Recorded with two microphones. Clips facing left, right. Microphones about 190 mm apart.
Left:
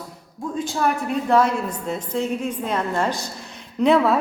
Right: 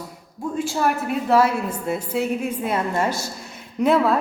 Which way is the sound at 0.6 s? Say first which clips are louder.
Even; 5° right (ahead or behind).